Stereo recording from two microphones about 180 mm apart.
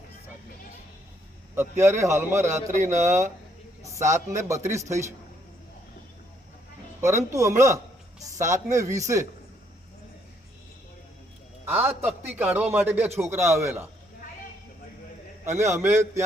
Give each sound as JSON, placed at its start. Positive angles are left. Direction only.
{"t": 1.5, "sound": "a man's voice", "side_deg": -15}
{"t": 7.0, "sound": "a man's voice", "side_deg": -15}
{"t": 11.7, "sound": "a man's voice", "side_deg": -10}
{"t": 15.4, "sound": "a man's voice", "side_deg": -15}